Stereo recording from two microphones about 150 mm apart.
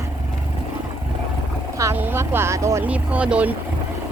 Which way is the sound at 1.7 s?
15° right (ahead or behind).